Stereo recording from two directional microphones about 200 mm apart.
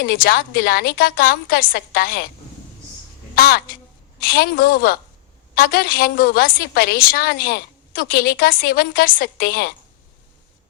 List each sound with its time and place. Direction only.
0.0 s a woman's voice: 50° left (ahead or behind)
3.3 s a woman's voice: 50° left (ahead or behind)